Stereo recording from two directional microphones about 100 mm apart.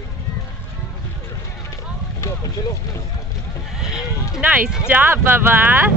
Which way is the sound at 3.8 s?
5° right (ahead or behind).